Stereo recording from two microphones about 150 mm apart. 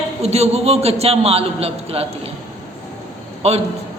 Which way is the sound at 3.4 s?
45° right (ahead or behind).